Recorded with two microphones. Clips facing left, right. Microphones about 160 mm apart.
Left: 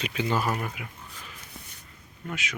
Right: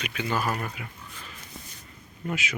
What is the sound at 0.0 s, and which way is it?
Speech, 25° left (ahead or behind).